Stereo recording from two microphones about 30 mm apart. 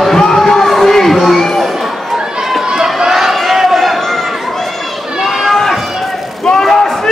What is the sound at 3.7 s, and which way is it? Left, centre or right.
Run, centre.